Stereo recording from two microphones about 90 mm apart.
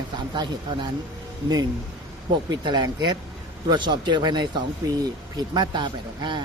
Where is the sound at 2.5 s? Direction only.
50° right (ahead or behind).